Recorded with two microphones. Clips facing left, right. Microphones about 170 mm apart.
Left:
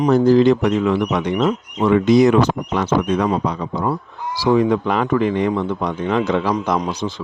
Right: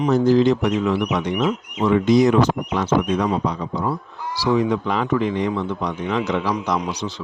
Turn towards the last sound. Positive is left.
turn(degrees=50)  # may be behind; listen again after turning